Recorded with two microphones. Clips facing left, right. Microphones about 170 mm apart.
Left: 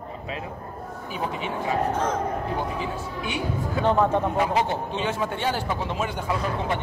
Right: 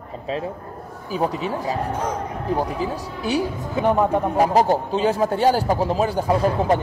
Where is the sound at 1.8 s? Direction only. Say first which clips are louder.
Even; 10° right (ahead or behind).